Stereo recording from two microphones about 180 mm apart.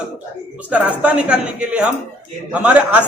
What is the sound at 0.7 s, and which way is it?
Speech, 10° right (ahead or behind).